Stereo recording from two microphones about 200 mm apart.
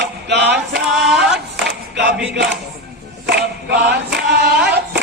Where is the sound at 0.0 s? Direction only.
60° right (ahead or behind).